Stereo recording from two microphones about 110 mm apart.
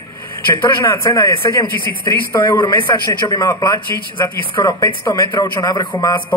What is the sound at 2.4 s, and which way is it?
A man's voice, 45° left (ahead or behind).